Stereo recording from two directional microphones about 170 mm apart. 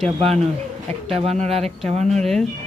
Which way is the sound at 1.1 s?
40° right (ahead or behind).